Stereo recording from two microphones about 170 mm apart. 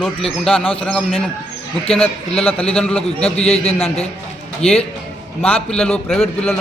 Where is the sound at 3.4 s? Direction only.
35° left (ahead or behind).